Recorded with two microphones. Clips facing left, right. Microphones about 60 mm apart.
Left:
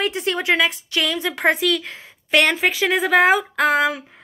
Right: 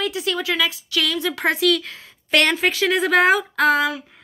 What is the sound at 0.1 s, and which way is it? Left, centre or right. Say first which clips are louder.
A woman's voice: left 3 dB; left.